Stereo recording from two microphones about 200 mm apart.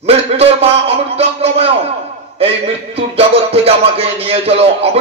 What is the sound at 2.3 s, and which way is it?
Music, 30° right (ahead or behind).